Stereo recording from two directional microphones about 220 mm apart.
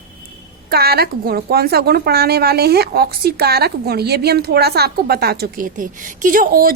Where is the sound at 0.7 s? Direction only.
45° right (ahead or behind).